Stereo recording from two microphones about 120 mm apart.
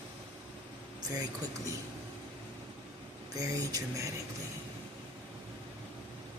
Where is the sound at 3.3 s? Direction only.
30° right (ahead or behind).